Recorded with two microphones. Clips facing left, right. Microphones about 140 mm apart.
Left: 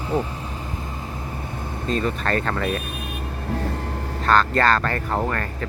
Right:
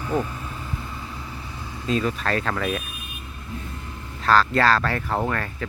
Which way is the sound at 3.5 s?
75° left (ahead or behind).